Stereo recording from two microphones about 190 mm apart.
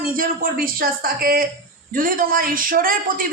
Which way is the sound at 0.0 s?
50° right (ahead or behind).